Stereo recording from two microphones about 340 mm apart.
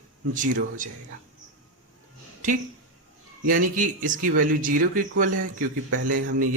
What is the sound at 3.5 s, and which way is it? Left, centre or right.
Speech, right.